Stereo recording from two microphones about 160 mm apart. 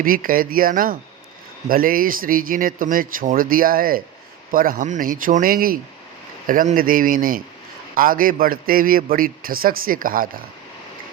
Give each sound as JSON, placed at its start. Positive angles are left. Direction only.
{"t": 0.0, "sound": "speech", "side_deg": -60}